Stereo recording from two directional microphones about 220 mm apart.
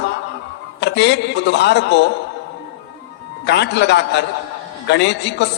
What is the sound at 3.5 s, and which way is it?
A man's voice, 50° left (ahead or behind).